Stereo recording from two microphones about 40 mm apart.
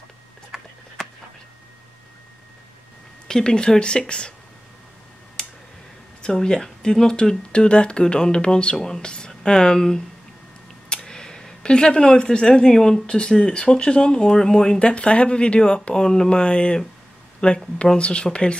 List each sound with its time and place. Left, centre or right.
0.5 s a sound: centre
3.3 s speech: centre
6.2 s speech: centre
14.8 s speech: left